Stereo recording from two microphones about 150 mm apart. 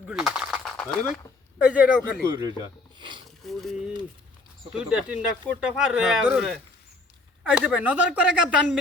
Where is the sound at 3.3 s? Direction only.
Centre (ahead or behind).